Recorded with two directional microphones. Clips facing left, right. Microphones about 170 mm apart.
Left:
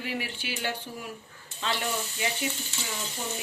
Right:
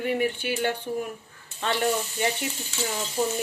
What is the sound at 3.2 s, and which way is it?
Speech, 40° right (ahead or behind).